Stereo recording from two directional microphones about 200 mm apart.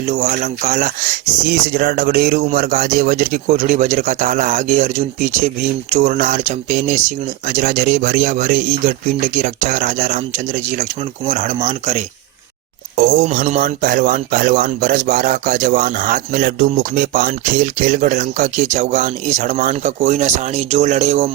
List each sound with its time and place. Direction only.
0.1 s a man's voice: 35° right (ahead or behind)
1.5 s a man's voice: 50° right (ahead or behind); by 12.0 s 35° right (ahead or behind)
13.2 s a man's voice: 35° right (ahead or behind)